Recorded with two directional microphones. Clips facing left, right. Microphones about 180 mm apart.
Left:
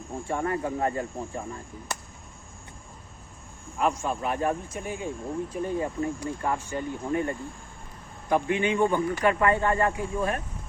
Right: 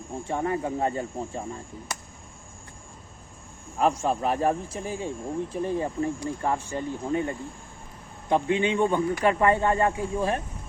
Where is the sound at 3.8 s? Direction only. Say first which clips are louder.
Right 3 dB; 35° right (ahead or behind).